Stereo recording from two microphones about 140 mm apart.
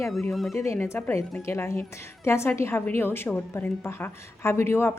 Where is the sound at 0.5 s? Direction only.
20° left (ahead or behind).